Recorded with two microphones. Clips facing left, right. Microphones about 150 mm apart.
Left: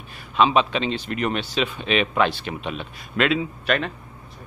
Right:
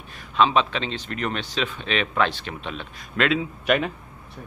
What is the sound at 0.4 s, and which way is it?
A man's voice, 10° left (ahead or behind).